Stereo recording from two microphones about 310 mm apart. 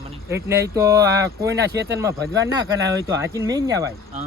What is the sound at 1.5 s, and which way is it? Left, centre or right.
Speech, right.